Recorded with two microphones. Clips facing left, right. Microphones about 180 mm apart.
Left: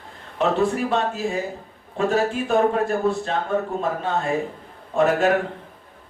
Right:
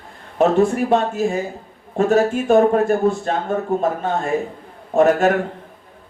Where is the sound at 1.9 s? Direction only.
45° right (ahead or behind).